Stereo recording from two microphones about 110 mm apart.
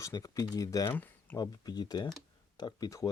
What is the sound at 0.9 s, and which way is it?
Speech, 15° left (ahead or behind).